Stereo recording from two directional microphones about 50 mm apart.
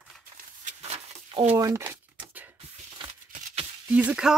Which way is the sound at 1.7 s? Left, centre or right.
Right.